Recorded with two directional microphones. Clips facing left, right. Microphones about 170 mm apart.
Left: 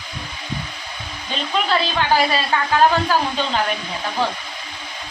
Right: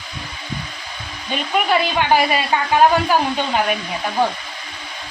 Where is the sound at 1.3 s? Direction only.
15° right (ahead or behind).